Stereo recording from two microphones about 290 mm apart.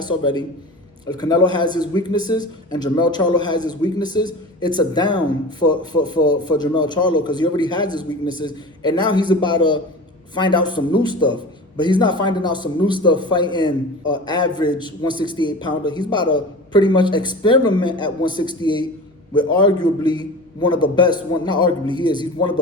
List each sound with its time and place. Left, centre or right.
0.0 s a man's voice: centre
13.4 s speech: centre
14.1 s a man's voice: centre